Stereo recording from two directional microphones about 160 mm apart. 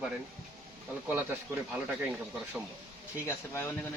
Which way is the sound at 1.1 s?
10° right (ahead or behind).